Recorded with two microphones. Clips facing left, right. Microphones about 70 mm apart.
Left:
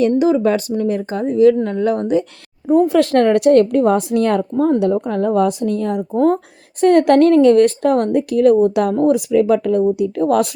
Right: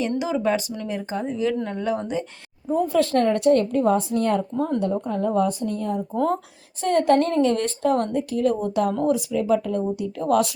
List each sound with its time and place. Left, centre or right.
0.2 s speech: left
0.9 s speech: left
2.6 s a woman's voice: left
6.1 s speech: left
6.8 s a woman's voice: left